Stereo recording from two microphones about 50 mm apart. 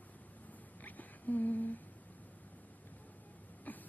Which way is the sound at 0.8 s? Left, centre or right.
Left.